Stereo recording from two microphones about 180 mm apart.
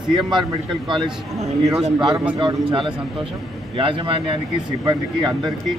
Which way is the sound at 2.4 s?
25° right (ahead or behind).